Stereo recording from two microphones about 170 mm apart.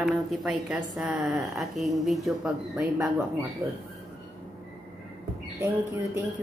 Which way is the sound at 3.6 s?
20° right (ahead or behind).